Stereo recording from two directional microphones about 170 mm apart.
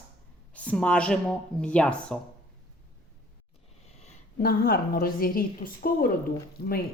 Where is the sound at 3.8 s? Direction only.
40° left (ahead or behind).